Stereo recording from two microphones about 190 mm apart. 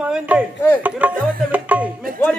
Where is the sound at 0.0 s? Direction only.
5° right (ahead or behind).